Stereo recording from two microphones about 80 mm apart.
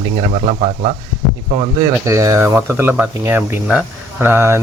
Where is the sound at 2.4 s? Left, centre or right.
Right.